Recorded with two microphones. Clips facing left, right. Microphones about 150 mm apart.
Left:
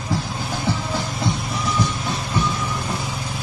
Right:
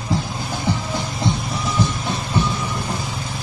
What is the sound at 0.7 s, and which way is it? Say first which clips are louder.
Music: right 1 dB; 15° right (ahead or behind).